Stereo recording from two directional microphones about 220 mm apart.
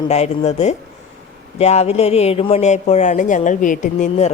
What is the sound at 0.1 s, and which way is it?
Speech, 30° left (ahead or behind).